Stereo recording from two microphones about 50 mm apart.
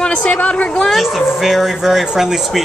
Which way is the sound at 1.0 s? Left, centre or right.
Centre.